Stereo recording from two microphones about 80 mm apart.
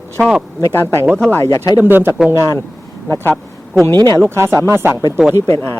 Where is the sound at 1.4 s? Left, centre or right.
Left.